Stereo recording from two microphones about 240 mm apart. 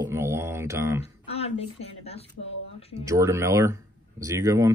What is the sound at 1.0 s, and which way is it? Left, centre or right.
A woman's voice, left.